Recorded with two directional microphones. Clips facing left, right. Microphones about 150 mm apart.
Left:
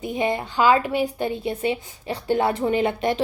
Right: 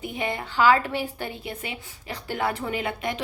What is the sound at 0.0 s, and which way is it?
A woman's voice, 20° left (ahead or behind).